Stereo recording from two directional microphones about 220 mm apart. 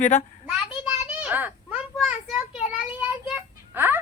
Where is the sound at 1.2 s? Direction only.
5° right (ahead or behind).